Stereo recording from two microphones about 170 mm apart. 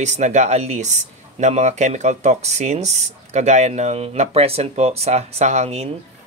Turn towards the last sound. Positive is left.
turn(degrees=-40)  # may be behind; listen again after turning